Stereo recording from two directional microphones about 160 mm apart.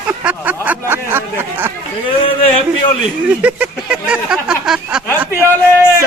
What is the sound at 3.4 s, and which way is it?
Speech, 5° right (ahead or behind).